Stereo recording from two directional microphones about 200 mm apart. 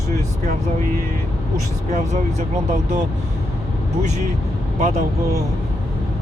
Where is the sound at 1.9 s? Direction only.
35° right (ahead or behind).